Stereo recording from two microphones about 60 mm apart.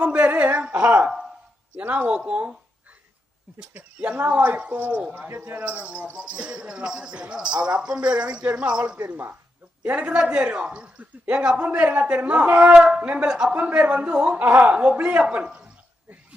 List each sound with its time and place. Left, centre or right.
0.0 s a sound: right
1.7 s speech: right
2.0 s speech: centre
3.9 s speech: right
9.0 s a man's voice: right
9.8 s speech: right
12.7 s speech: centre
13.0 s speech: right
13.2 s speech: centre
13.5 s speech: right